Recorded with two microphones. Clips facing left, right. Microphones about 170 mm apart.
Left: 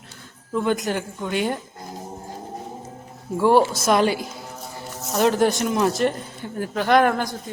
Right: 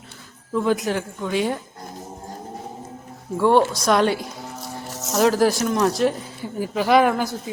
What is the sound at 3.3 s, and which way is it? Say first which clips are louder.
Speech: even; centre (ahead or behind).